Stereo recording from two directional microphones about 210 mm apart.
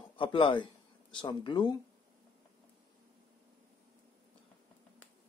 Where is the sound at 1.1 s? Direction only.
20° left (ahead or behind).